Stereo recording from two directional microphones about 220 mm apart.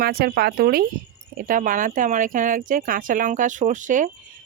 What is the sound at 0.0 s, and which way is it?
Speech, 45° right (ahead or behind).